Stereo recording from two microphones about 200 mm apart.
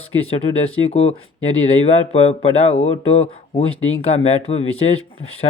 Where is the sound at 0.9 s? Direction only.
30° left (ahead or behind).